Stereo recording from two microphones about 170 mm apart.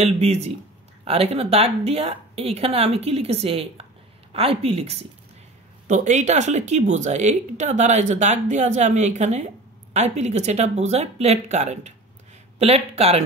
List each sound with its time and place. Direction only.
0.0 s speech: 40° right (ahead or behind)